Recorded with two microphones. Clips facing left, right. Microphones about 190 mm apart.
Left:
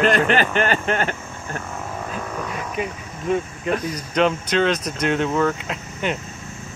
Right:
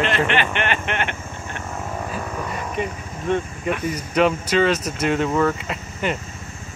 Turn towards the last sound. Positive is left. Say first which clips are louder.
# even
turn(degrees=0)  # may be behind; listen again after turning